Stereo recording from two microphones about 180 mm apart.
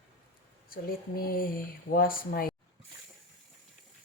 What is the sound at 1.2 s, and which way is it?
Speech, 55° left (ahead or behind).